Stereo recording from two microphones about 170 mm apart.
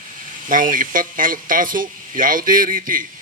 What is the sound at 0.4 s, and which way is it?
Speech, 55° right (ahead or behind).